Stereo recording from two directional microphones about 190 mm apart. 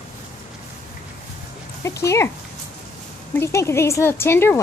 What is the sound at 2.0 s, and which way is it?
Speech, 15° left (ahead or behind).